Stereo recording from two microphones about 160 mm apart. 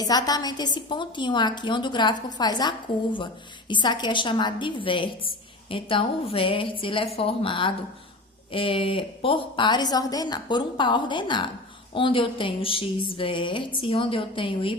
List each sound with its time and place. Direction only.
0.0 s a woman's voice: 25° left (ahead or behind)